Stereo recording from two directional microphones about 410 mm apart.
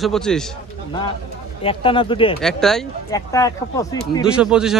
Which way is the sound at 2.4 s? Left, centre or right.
Centre.